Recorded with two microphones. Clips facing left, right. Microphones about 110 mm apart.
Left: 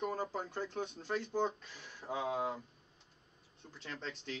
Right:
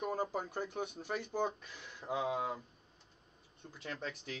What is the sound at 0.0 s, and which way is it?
Speech, 15° right (ahead or behind).